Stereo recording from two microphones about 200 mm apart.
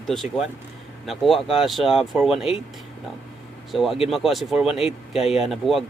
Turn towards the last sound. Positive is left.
turn(degrees=0)  # may be behind; listen again after turning